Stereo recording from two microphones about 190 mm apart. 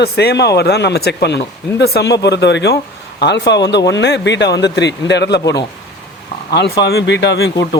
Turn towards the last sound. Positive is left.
turn(degrees=65)  # may be behind; listen again after turning